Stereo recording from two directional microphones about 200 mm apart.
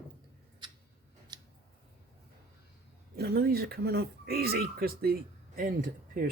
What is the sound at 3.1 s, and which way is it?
Speech, 50° right (ahead or behind).